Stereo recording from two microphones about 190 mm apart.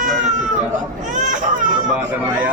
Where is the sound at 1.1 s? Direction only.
40° right (ahead or behind).